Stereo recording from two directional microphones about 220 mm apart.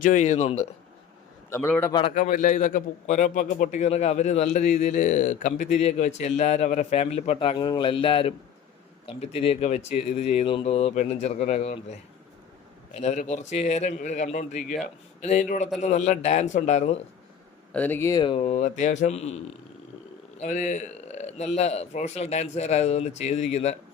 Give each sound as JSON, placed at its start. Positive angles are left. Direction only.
{"t": 0.0, "sound": "a man's voice", "side_deg": 35}
{"t": 1.5, "sound": "a man's voice", "side_deg": 10}
{"t": 2.1, "sound": "a man's voice", "side_deg": 35}
{"t": 17.7, "sound": "speech", "side_deg": 5}
{"t": 20.4, "sound": "a man's voice", "side_deg": 35}